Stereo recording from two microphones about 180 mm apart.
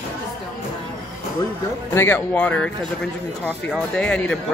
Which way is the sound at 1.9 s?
10° left (ahead or behind).